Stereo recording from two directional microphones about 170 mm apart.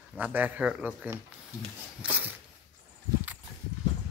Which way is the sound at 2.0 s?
10° right (ahead or behind).